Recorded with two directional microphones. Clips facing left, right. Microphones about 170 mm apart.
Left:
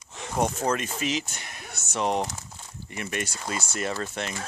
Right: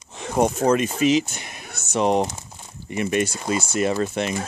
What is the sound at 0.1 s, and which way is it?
Speech, 20° right (ahead or behind).